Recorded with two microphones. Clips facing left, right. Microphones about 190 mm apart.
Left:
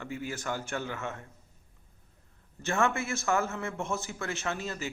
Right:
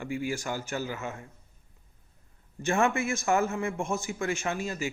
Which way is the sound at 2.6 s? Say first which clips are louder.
Right 3 dB; 15° right (ahead or behind).